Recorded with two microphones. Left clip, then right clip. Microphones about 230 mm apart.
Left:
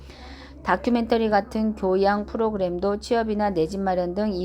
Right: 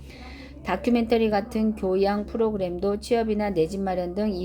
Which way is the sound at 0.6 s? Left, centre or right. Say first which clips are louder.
Left 2 dB; centre.